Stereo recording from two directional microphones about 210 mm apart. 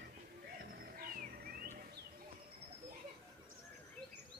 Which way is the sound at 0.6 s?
45° right (ahead or behind).